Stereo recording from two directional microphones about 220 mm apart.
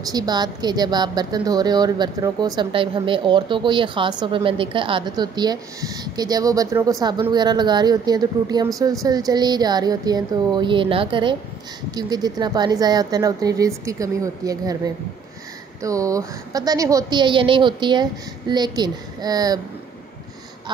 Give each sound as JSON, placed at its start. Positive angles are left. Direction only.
{"t": 0.0, "sound": "a woman's voice", "side_deg": -15}
{"t": 15.8, "sound": "a woman's voice", "side_deg": -15}